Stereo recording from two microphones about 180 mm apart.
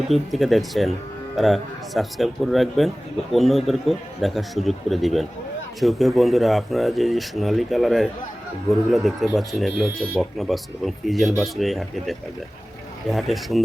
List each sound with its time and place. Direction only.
0.1 s speech: centre (ahead or behind)